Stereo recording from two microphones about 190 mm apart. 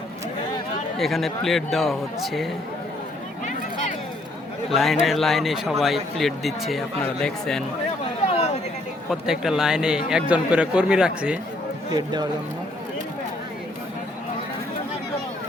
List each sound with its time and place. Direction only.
0.9 s a man's voice: centre (ahead or behind)
4.7 s a man's voice: centre (ahead or behind)
9.0 s a man's voice: 5° right (ahead or behind)
11.9 s speech: 20° right (ahead or behind)